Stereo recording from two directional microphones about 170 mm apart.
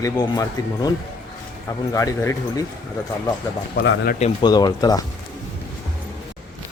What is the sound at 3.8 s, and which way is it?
Speech, 80° left.